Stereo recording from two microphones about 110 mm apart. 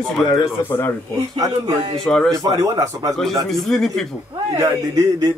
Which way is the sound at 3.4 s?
5° left (ahead or behind).